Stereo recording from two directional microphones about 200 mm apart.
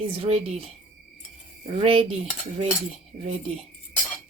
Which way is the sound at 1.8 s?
25° right (ahead or behind).